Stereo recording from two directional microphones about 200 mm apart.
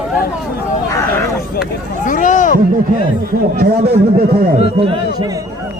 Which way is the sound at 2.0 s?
40° left (ahead or behind).